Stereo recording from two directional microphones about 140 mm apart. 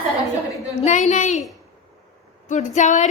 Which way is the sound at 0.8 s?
55° left (ahead or behind).